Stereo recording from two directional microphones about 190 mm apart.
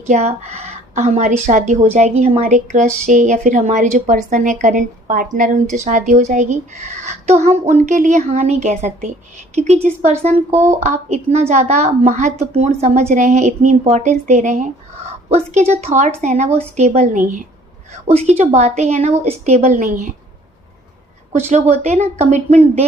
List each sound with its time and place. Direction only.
0.1 s a woman's voice: 35° right (ahead or behind)
21.3 s a woman's voice: 35° right (ahead or behind)